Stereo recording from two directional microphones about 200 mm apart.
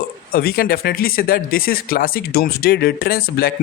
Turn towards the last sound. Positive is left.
turn(degrees=50)  # may be behind; listen again after turning